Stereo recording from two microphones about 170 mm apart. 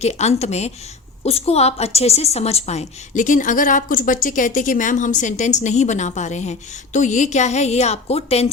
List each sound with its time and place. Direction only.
0.0 s a woman's voice: 40° left (ahead or behind)